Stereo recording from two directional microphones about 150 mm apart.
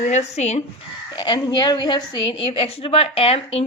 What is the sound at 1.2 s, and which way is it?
A woman's voice, 30° left (ahead or behind).